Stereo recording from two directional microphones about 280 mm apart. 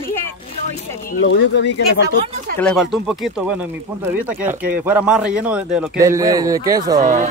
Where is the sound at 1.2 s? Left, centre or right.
Left.